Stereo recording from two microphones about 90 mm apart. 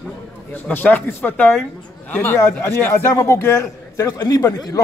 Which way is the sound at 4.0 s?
45° left (ahead or behind).